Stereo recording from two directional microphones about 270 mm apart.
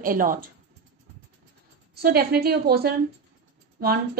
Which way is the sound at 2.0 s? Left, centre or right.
Right.